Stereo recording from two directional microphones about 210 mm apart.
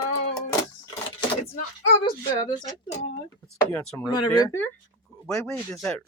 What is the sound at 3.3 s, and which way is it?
Speech, 5° left (ahead or behind).